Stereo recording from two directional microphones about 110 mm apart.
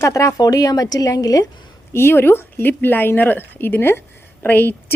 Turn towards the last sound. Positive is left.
turn(degrees=20)  # may be behind; listen again after turning